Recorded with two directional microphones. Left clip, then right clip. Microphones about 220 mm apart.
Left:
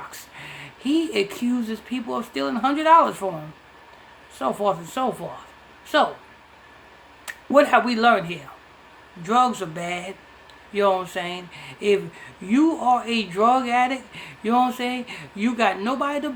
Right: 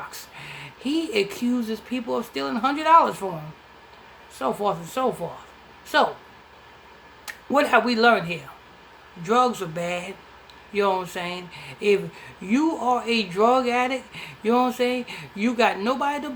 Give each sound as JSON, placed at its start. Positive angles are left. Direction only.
{"t": 0.1, "sound": "speech", "side_deg": 10}
{"t": 4.4, "sound": "speech", "side_deg": 10}
{"t": 7.3, "sound": "speech", "side_deg": 10}